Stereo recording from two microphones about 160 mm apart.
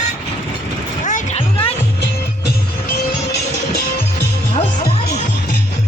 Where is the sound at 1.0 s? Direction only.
50° left (ahead or behind).